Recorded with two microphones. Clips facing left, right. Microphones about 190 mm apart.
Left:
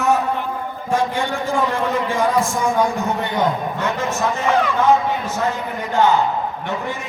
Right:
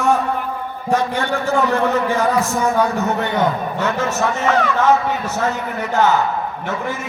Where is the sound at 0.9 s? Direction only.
10° left (ahead or behind).